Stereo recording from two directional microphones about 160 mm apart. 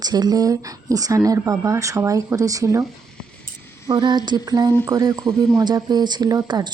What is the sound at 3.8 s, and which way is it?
A woman's voice, 25° right (ahead or behind).